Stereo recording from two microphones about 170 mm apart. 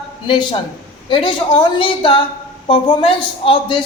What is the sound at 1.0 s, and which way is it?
A woman's voice, 30° left (ahead or behind).